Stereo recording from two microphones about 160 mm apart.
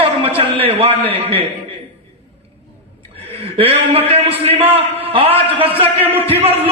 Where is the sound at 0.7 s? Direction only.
35° right (ahead or behind).